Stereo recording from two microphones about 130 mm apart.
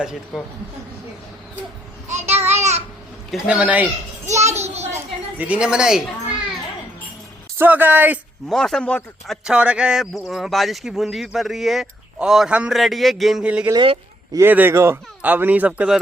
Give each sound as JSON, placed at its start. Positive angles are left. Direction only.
{"t": 0.0, "sound": "a man's voice", "side_deg": -5}
{"t": 2.0, "sound": "a sound", "side_deg": -60}
{"t": 2.5, "sound": "babbling", "side_deg": -60}
{"t": 3.3, "sound": "speech", "side_deg": -5}
{"t": 4.3, "sound": "a sound", "side_deg": -60}
{"t": 5.4, "sound": "a man's voice", "side_deg": -10}
{"t": 7.6, "sound": "speech", "side_deg": -15}
{"t": 8.4, "sound": "a man's voice", "side_deg": 5}